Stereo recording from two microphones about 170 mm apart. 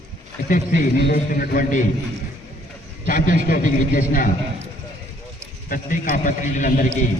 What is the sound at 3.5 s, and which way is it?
Speech, 55° left (ahead or behind).